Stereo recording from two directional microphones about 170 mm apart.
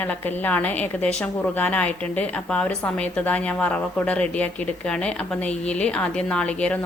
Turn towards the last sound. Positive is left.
turn(degrees=5)  # may be behind; listen again after turning